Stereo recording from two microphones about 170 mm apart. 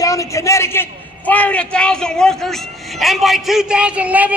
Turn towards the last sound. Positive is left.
turn(degrees=-10)  # may be behind; listen again after turning